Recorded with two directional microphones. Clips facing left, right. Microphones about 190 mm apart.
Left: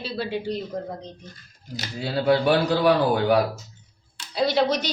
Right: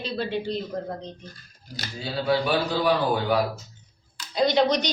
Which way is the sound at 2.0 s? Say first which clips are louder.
Left 3 dB; 60° left (ahead or behind).